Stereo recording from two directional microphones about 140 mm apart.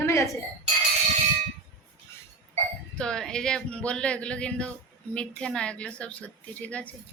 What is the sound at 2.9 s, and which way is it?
A woman's voice, 5° left (ahead or behind).